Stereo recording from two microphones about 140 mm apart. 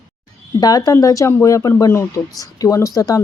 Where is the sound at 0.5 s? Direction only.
30° left (ahead or behind).